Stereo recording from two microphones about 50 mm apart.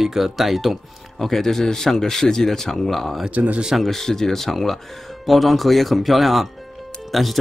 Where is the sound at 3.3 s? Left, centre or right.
Right.